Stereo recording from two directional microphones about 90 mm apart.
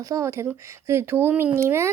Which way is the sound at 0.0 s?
35° right (ahead or behind).